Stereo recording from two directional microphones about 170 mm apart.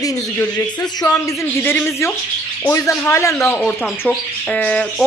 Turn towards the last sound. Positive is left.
turn(degrees=5)  # may be behind; listen again after turning